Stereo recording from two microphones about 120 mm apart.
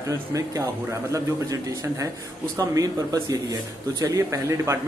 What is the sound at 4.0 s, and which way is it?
Speech, 25° right (ahead or behind).